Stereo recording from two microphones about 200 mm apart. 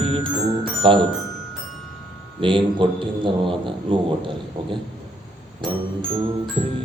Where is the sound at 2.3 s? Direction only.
25° right (ahead or behind).